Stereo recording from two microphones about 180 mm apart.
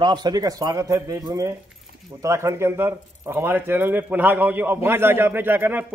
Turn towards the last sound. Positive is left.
turn(degrees=-10)  # may be behind; listen again after turning